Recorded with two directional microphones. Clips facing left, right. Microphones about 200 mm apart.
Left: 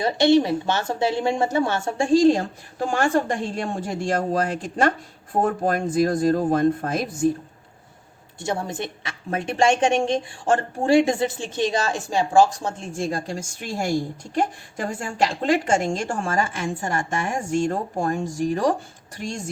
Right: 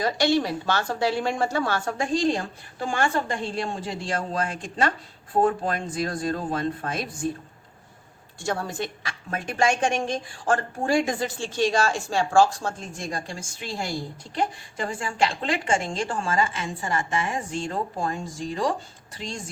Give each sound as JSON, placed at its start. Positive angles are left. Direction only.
{"t": 0.0, "sound": "a woman's voice", "side_deg": 20}
{"t": 8.4, "sound": "a woman's voice", "side_deg": 20}
{"t": 13.0, "sound": "a woman's voice", "side_deg": 35}